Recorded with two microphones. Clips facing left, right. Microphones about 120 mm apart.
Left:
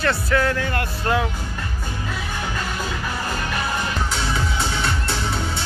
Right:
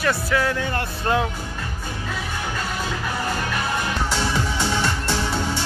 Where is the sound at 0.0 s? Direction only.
10° right (ahead or behind).